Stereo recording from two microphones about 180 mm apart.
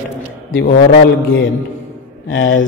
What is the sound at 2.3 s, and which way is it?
Speech, 90° left.